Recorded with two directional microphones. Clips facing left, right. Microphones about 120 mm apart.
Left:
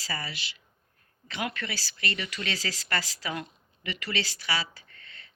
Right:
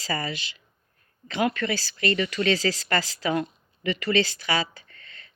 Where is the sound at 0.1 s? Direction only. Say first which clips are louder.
Right 7 dB; 45° right (ahead or behind).